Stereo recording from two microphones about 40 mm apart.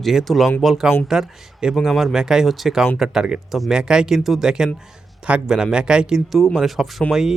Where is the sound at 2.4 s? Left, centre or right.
Centre; by 6.2 s right.